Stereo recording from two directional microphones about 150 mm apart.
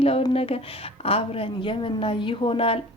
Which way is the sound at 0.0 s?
40° left (ahead or behind).